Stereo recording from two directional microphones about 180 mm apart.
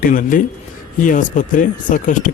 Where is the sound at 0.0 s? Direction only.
45° left (ahead or behind).